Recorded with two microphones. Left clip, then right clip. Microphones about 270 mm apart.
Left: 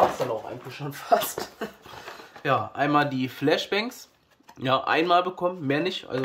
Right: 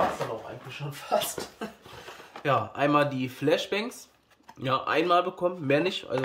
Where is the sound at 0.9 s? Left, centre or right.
Centre.